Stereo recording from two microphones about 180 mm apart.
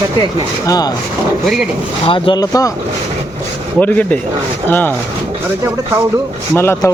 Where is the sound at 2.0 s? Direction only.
30° left (ahead or behind).